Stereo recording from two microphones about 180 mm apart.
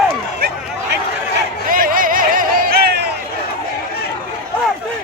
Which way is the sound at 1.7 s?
50° right (ahead or behind).